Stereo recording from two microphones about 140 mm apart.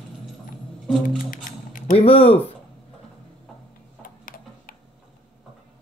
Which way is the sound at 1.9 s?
45° left (ahead or behind).